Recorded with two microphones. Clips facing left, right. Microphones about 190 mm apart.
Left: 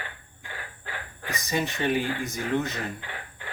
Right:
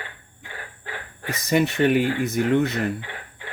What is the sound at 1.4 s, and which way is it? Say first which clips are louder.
Speech: right 8 dB; 65° right (ahead or behind).